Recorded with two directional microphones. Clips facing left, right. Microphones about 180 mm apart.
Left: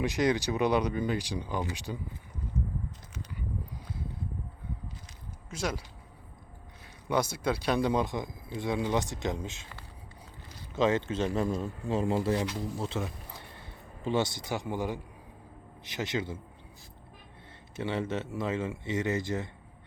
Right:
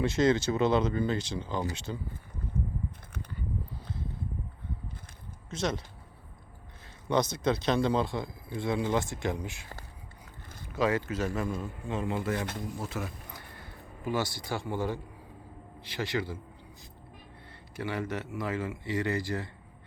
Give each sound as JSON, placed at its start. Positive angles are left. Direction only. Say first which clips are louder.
{"t": 0.0, "sound": "speech", "louder": "right 2 dB", "side_deg": 15}
{"t": 3.1, "sound": "a sound", "louder": "right 1 dB", "side_deg": -55}
{"t": 5.5, "sound": "speech", "louder": "right 2 dB", "side_deg": 10}
{"t": 7.1, "sound": "speech", "louder": "right 2 dB", "side_deg": 10}
{"t": 10.8, "sound": "speech", "louder": "left 2 dB", "side_deg": 25}
{"t": 17.7, "sound": "speech", "louder": "left 2 dB", "side_deg": 25}